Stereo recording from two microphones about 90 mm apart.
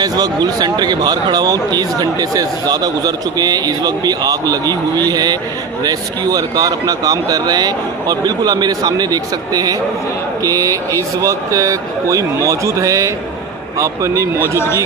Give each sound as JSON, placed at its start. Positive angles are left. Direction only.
{"t": 0.0, "sound": "a man's voice", "side_deg": -50}